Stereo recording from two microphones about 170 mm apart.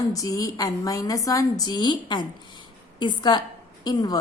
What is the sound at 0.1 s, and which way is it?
Speech, 20° left (ahead or behind).